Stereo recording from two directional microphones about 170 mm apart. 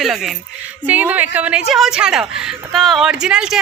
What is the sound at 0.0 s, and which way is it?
A woman's voice, centre (ahead or behind).